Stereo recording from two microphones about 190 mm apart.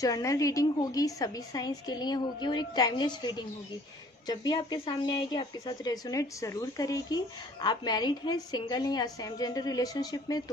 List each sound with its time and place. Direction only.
0.0 s a woman's voice: 20° left (ahead or behind)